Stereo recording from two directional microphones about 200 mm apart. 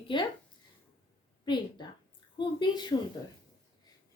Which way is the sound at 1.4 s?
20° left (ahead or behind).